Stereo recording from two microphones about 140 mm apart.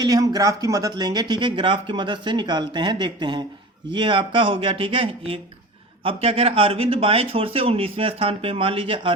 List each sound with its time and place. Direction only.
0.0 s speech: 25° right (ahead or behind)